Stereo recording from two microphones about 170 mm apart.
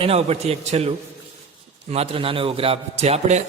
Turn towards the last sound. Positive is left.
turn(degrees=-40)  # may be behind; listen again after turning